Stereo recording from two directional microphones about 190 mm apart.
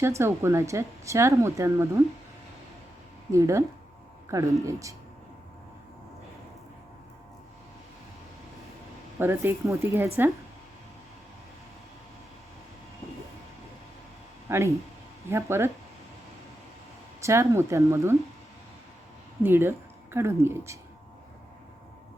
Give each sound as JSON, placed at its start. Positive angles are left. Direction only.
{"t": 0.0, "sound": "speech", "side_deg": -15}
{"t": 3.3, "sound": "speech", "side_deg": -15}
{"t": 9.1, "sound": "speech", "side_deg": -10}
{"t": 14.5, "sound": "speech", "side_deg": -15}
{"t": 17.2, "sound": "speech", "side_deg": -15}
{"t": 19.4, "sound": "speech", "side_deg": -10}